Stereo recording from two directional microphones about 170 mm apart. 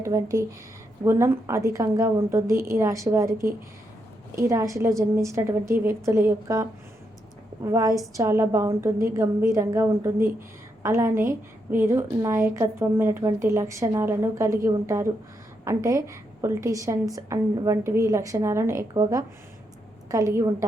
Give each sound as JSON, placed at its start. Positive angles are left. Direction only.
{"t": 0.0, "sound": "a woman's voice", "side_deg": -20}